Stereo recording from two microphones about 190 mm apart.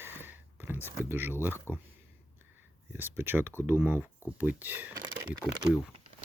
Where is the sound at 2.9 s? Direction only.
10° right (ahead or behind).